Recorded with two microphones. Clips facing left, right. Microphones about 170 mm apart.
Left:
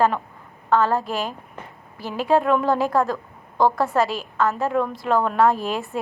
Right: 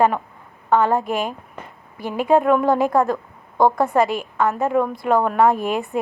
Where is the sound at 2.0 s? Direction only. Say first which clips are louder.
Right 3 dB; 55° right (ahead or behind).